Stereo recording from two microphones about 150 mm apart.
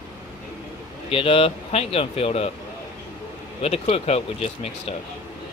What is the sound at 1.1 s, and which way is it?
Speech, 40° left (ahead or behind).